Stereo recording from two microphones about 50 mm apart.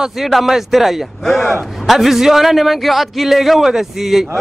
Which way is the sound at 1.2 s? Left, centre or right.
Centre.